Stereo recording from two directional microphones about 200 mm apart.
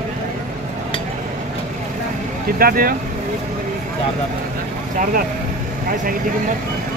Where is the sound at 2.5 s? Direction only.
45° right (ahead or behind).